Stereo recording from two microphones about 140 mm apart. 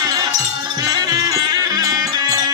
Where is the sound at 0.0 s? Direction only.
25° right (ahead or behind).